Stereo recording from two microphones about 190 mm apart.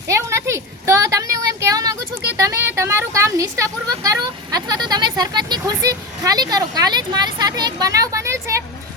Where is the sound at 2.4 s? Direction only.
15° right (ahead or behind).